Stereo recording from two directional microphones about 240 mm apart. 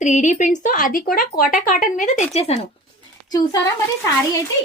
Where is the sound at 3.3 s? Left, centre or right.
Centre.